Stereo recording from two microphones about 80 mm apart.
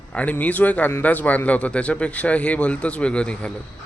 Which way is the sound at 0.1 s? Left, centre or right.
Centre.